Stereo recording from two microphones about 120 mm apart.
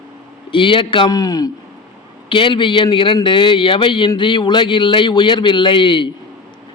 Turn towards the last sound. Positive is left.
turn(degrees=40)  # may be behind; listen again after turning